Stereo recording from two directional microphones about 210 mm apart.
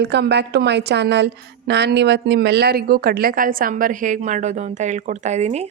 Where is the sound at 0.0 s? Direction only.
55° right (ahead or behind).